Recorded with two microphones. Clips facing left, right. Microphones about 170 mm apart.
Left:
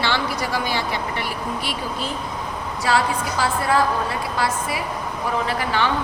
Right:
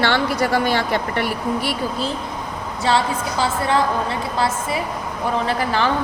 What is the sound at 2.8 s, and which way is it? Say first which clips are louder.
A woman's voice: right 1 dB; 25° right (ahead or behind).